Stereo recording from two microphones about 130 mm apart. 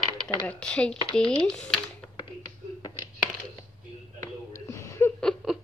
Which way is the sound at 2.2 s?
35° left (ahead or behind).